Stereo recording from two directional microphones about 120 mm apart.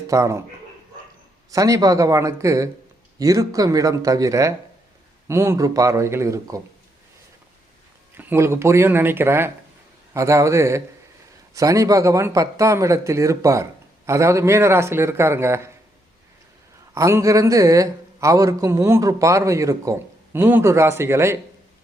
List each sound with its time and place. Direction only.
0.1 s a man's voice: 25° right (ahead or behind)
1.5 s a man's voice: 30° right (ahead or behind)
8.1 s a man's voice: 15° right (ahead or behind)
16.9 s a man's voice: 25° right (ahead or behind)